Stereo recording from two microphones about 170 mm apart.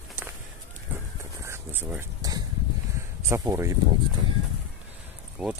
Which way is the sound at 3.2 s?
15° right (ahead or behind).